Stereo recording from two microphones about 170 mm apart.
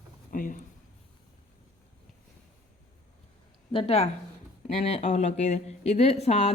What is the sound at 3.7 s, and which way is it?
Speech, 35° left (ahead or behind).